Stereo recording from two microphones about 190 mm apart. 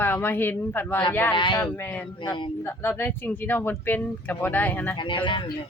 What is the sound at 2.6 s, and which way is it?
Speech, 10° left (ahead or behind).